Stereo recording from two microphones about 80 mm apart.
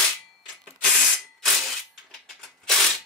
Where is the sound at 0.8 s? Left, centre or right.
Centre.